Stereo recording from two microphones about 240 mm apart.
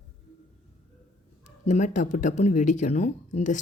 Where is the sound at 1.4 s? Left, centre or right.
Left.